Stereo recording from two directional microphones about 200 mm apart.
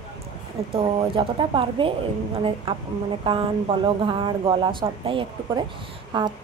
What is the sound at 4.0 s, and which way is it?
A woman's voice, 25° right (ahead or behind).